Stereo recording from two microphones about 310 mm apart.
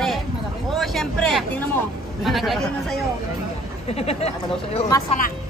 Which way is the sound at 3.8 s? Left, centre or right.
Centre.